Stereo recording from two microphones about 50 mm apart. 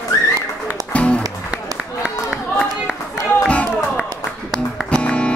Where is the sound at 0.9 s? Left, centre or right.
Left.